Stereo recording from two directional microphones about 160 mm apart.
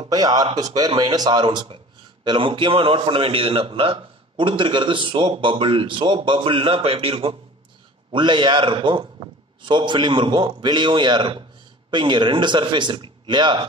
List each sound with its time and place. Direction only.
0.0 s a man's voice: 25° right (ahead or behind)